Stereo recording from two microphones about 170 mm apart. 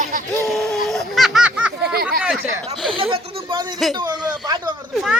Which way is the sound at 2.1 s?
5° right (ahead or behind).